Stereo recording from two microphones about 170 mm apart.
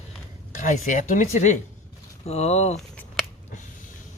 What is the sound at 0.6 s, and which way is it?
Speech, 45° left (ahead or behind).